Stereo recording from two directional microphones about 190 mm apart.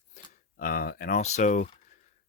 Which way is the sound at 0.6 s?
50° left (ahead or behind).